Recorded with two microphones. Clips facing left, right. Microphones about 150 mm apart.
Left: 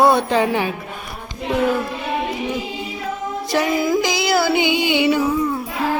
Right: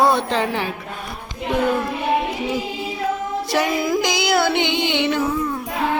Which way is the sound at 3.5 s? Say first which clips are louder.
Left 2 dB; centre (ahead or behind).